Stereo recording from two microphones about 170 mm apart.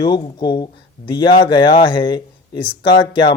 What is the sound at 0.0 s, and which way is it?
Speech, 25° left (ahead or behind).